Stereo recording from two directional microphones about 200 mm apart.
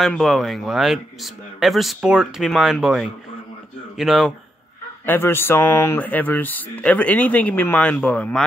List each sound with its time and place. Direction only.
0.0 s speech: centre (ahead or behind)
5.0 s speech: 10° left (ahead or behind)